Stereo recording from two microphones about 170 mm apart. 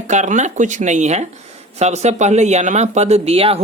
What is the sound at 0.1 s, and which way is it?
Speech, 45° right (ahead or behind).